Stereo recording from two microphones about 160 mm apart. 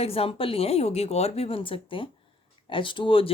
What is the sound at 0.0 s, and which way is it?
Speech, 35° left (ahead or behind).